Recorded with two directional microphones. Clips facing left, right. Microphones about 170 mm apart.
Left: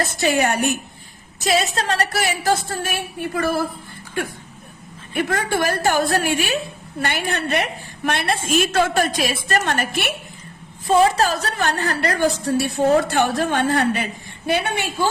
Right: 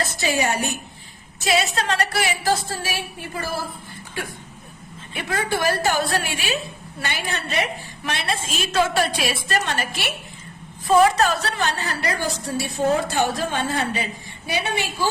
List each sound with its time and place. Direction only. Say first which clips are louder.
0.0 s a woman's voice: left 4 dB; 55° left (ahead or behind)
1.5 s a woman's voice: left 2 dB; 35° left (ahead or behind); by 3.6 s 60° left (ahead or behind)
5.1 s a woman's voice: left 4 dB; 50° left (ahead or behind)
11.0 s a woman's voice: even; 30° left (ahead or behind); by 15.1 s 55° left (ahead or behind)